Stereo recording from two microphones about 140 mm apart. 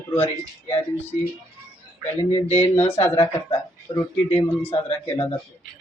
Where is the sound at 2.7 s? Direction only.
45° left (ahead or behind).